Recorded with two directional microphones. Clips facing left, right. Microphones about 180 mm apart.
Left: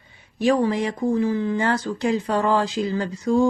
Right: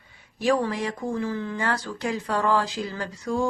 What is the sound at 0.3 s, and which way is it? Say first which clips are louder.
Speech: left 4 dB; 20° left (ahead or behind).